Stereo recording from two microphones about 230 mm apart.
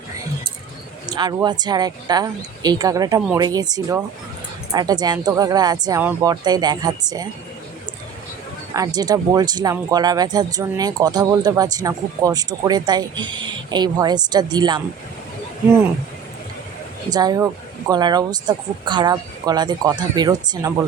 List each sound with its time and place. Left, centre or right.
1.0 s speech: centre
8.7 s speech: centre
17.1 s speech: centre